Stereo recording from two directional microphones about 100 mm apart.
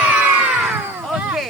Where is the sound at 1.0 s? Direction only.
5° right (ahead or behind).